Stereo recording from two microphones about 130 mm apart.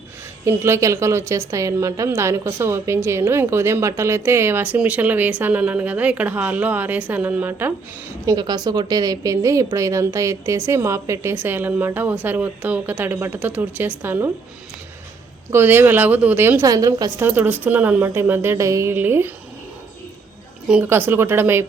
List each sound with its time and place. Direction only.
0.4 s a woman's voice: 20° right (ahead or behind)
8.3 s a woman's voice: 30° right (ahead or behind); by 14.3 s 15° right (ahead or behind)
15.4 s a woman's voice: 15° right (ahead or behind)
17.2 s a woman's voice: 15° right (ahead or behind)
20.8 s a woman's voice: 20° right (ahead or behind)